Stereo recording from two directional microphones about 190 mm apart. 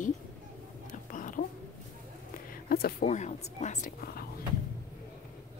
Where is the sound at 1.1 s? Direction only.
45° left (ahead or behind).